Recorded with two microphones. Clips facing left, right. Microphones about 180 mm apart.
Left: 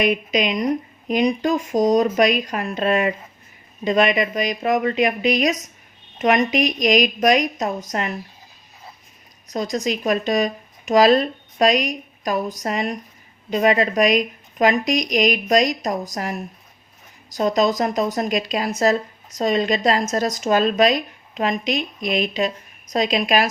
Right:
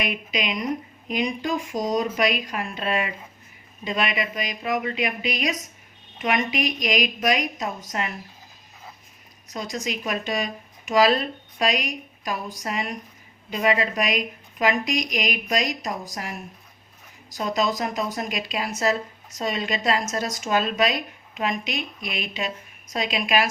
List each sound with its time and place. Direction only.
0.0 s speech: 45° left (ahead or behind)
9.5 s speech: 40° left (ahead or behind)